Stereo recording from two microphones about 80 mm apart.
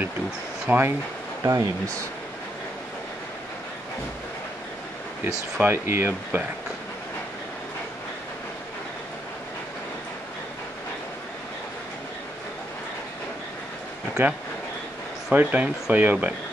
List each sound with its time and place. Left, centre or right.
0.7 s speech: right
1.4 s speech: right
5.6 s speech: right
14.2 s speech: right